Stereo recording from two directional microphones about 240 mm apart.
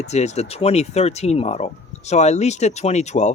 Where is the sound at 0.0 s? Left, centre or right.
Left.